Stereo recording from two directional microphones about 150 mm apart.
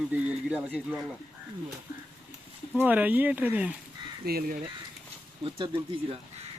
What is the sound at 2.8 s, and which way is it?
Speech, 10° right (ahead or behind).